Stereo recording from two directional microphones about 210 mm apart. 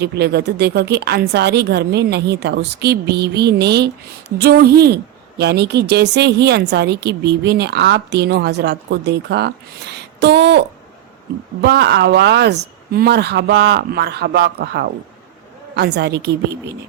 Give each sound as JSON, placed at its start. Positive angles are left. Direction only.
{"t": 0.0, "sound": "speech", "side_deg": -50}